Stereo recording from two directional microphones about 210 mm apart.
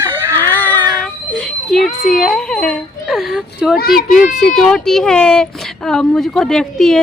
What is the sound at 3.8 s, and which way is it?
Speech, 45° left (ahead or behind).